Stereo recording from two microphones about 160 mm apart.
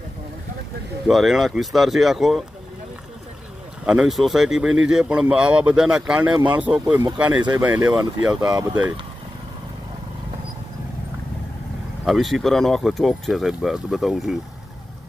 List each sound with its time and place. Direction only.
1.0 s speech: centre (ahead or behind)
3.8 s speech: 5° right (ahead or behind)
12.0 s speech: centre (ahead or behind)